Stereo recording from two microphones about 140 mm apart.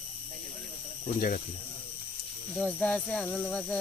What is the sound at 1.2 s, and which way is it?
Speech, 90° left.